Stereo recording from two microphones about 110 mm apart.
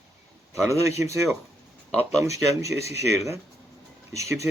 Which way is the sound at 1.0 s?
25° right (ahead or behind).